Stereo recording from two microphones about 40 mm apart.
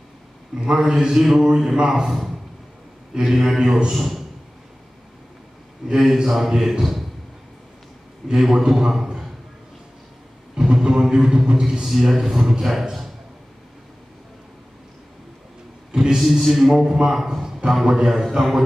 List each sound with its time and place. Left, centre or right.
0.6 s a man's voice: centre
3.2 s a man's voice: centre
3.9 s a man's voice: centre
5.9 s a man's voice: centre
8.3 s a man's voice: centre
10.5 s a man's voice: centre
11.8 s a man's voice: centre
15.9 s a sound: centre
16.2 s a man's voice: centre